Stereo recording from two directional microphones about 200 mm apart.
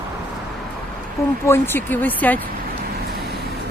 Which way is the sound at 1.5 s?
10° left (ahead or behind).